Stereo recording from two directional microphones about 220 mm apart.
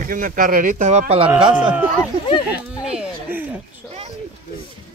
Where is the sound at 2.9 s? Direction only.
5° right (ahead or behind).